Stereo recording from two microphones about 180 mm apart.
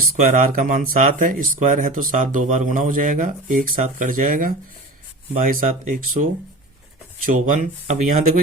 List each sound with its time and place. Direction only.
0.0 s speech: 50° right (ahead or behind)
7.3 s speech: 45° right (ahead or behind)